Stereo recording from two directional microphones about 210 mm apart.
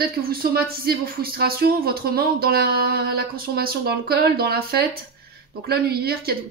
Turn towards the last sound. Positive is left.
turn(degrees=-45)  # may be behind; listen again after turning